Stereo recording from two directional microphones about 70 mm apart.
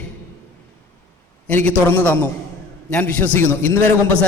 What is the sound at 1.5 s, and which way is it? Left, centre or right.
A man's voice, left.